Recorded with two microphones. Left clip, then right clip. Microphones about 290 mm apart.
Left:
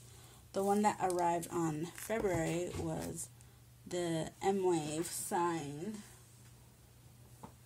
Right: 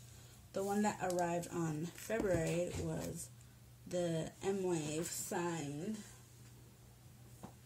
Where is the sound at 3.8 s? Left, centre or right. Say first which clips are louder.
Left 1 dB; left.